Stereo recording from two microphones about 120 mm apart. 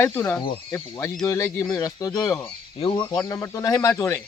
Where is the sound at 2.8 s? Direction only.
50° left (ahead or behind).